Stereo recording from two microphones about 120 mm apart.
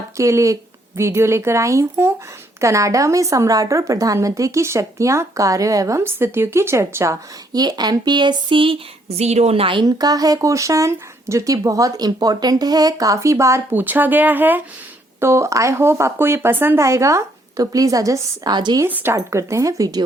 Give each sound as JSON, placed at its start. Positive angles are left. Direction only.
{"t": 0.2, "sound": "a woman's voice", "side_deg": -25}
{"t": 9.8, "sound": "a woman's voice", "side_deg": -30}
{"t": 18.9, "sound": "speech", "side_deg": -15}
{"t": 19.1, "sound": "a woman's voice", "side_deg": -25}